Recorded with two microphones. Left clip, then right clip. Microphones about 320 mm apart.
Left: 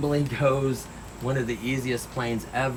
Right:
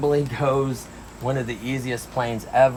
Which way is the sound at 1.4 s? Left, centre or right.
Right.